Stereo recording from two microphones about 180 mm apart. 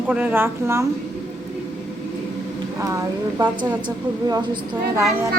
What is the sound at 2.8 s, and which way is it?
A woman's voice, 20° right (ahead or behind).